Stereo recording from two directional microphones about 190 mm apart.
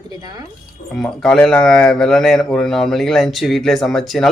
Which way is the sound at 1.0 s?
5° left (ahead or behind).